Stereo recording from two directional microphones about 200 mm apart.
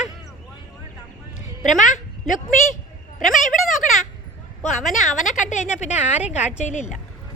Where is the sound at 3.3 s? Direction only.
Centre (ahead or behind).